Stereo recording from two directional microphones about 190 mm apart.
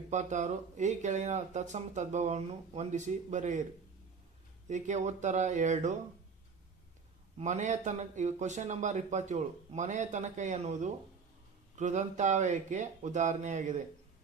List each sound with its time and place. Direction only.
0.1 s speech: 40° right (ahead or behind)
4.7 s speech: 40° right (ahead or behind)
7.3 s speech: 40° right (ahead or behind)